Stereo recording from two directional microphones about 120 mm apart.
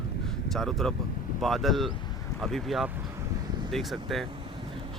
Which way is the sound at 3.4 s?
35° right (ahead or behind).